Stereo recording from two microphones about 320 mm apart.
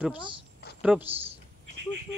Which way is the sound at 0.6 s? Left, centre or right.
Left.